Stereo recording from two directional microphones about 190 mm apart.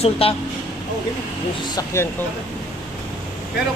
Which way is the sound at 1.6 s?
15° left (ahead or behind).